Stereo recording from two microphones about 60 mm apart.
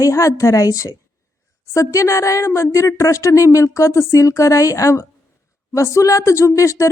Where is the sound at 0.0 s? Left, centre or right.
Left.